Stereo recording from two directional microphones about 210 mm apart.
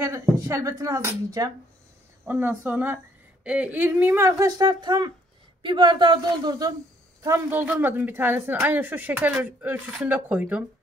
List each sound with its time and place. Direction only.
0.0 s speech: 15° right (ahead or behind)